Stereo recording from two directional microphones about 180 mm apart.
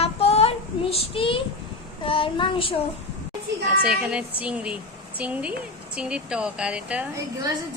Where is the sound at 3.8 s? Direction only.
5° right (ahead or behind).